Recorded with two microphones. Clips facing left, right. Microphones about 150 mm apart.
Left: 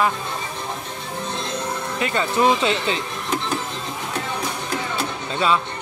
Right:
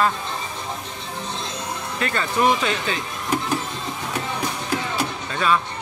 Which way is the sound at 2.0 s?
20° left (ahead or behind).